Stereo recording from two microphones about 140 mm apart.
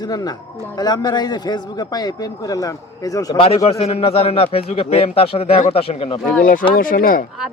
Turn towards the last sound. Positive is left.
turn(degrees=85)